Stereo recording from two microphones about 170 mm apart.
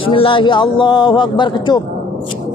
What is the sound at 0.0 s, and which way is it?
A man's voice, 30° left (ahead or behind).